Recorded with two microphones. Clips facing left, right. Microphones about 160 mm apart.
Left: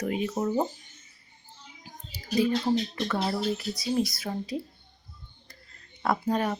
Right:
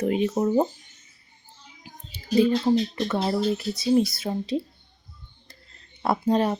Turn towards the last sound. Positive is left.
turn(degrees=-25)  # may be behind; listen again after turning